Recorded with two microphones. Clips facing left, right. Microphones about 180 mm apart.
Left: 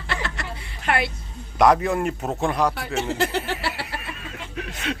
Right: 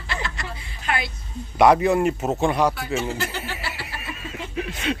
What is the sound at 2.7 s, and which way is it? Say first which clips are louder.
Speech: even; 65° left (ahead or behind).